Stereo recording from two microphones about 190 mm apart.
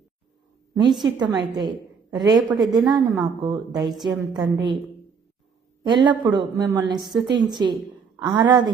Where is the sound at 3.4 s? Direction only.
20° right (ahead or behind).